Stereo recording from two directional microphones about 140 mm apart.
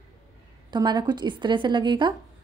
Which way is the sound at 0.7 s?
30° right (ahead or behind).